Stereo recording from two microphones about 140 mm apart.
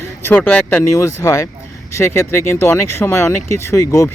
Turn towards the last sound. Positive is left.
turn(degrees=20)  # may be behind; listen again after turning